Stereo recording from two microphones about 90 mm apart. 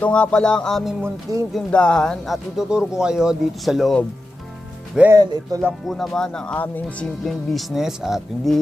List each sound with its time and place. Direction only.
0.0 s speech: 10° left (ahead or behind)
1.0 s speech: 35° right (ahead or behind)
1.5 s speech: 10° left (ahead or behind)
5.1 s speech: 45° right (ahead or behind)
5.9 s speech: 5° left (ahead or behind)
7.3 s speech: centre (ahead or behind)